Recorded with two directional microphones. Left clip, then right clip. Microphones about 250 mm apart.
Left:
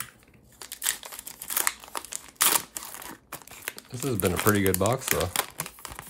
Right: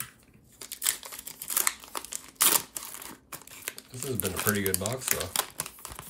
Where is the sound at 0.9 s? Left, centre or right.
Centre.